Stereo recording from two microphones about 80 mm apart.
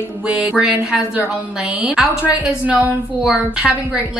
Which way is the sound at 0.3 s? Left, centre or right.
Centre.